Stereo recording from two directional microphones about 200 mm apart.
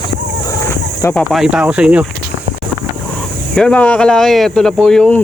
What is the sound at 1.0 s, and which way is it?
Speech, 5° left (ahead or behind).